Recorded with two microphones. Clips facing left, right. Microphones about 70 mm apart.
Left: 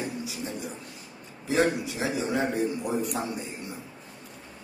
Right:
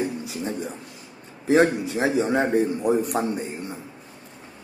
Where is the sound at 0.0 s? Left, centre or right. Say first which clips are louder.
Right 6 dB; right.